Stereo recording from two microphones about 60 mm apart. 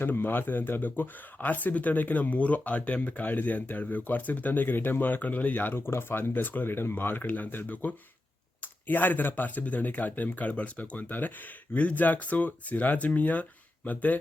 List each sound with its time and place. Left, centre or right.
0.0 s speech: left